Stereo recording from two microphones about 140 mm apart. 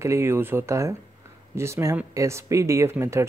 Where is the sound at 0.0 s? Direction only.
20° right (ahead or behind).